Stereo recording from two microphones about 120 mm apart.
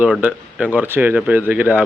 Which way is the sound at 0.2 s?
15° right (ahead or behind).